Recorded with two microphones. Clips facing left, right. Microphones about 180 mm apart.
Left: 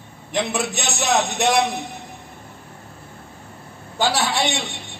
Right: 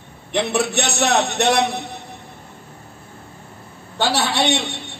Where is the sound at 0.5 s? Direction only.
65° right (ahead or behind).